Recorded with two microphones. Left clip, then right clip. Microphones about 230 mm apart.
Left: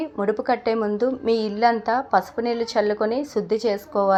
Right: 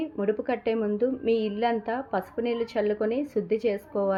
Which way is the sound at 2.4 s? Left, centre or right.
Centre.